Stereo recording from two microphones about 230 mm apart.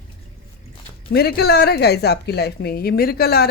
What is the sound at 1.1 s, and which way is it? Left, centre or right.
A woman's voice, left.